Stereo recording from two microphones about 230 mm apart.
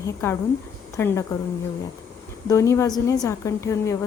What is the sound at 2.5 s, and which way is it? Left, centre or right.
A woman's voice, centre.